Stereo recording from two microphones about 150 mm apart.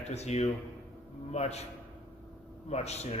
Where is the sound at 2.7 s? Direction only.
45° left (ahead or behind).